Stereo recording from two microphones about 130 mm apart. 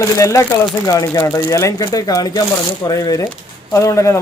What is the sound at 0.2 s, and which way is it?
Speech, 25° left (ahead or behind).